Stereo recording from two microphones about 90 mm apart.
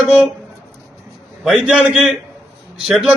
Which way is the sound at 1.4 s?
5° right (ahead or behind).